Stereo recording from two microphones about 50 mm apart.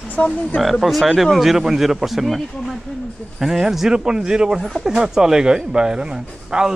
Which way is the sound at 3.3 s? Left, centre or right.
Centre.